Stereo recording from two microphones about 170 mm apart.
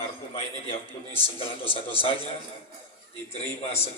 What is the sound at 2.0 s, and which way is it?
Speech, 30° left (ahead or behind).